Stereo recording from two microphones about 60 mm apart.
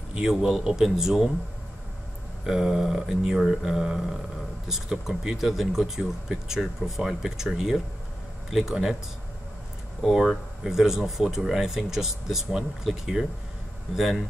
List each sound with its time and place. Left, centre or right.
0.2 s speech: centre
2.4 s speech: centre
10.0 s speech: centre